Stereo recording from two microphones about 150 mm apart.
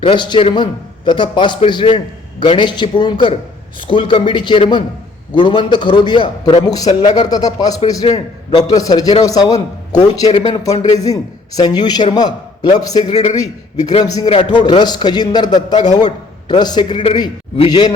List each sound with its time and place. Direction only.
0.0 s a man's voice: 30° left (ahead or behind)
9.9 s speech: 45° left (ahead or behind)
10.4 s a man's voice: 25° left (ahead or behind)
13.1 s speech: 45° left (ahead or behind)
14.0 s a man's voice: 25° left (ahead or behind)